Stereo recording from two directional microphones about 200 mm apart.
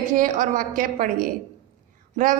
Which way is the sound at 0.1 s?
40° right (ahead or behind).